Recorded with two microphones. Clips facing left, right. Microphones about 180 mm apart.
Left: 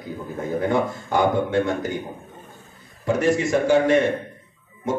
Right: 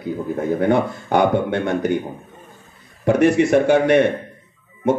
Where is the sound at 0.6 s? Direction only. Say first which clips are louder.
Right 3 dB; 65° right (ahead or behind).